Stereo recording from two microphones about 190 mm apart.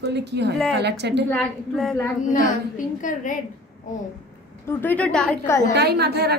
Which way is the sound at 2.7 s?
45° left (ahead or behind).